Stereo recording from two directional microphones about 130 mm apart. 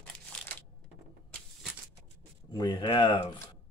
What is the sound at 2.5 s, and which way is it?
Speech, 35° left (ahead or behind).